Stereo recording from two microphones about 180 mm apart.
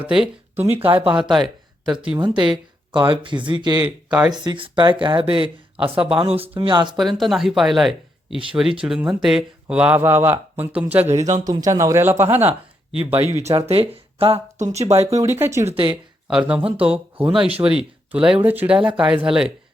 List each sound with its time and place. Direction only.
0.0 s speech: 5° right (ahead or behind)
0.6 s speech: 35° right (ahead or behind)
1.3 s speech: centre (ahead or behind)
2.5 s speech: 25° right (ahead or behind)
6.0 s speech: 5° right (ahead or behind)
6.2 s speech: 30° right (ahead or behind)
6.9 s speech: centre (ahead or behind)
11.1 s speech: 40° right (ahead or behind)
11.3 s speech: 20° right (ahead or behind)
13.1 s speech: 35° right (ahead or behind)
15.1 s speech: 15° right (ahead or behind)
15.6 s speech: 30° right (ahead or behind)
16.3 s speech: 10° right (ahead or behind)